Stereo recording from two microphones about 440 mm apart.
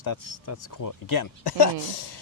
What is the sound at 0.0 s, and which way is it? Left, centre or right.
Speech, left.